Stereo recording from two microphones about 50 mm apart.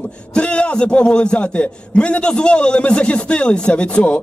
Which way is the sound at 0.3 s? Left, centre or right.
Left.